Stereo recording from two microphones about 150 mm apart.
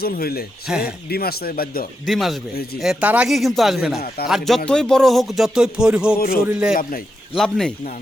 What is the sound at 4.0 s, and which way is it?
Speech, 90° left.